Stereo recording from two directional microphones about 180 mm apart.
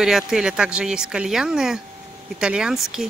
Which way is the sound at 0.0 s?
5° right (ahead or behind).